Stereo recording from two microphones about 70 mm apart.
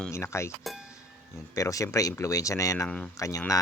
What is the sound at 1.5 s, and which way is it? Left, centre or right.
Speech, left.